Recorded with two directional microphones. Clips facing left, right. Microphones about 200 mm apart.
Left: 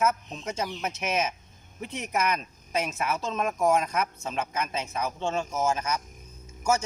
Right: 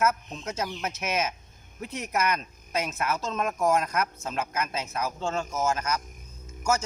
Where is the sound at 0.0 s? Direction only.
5° right (ahead or behind).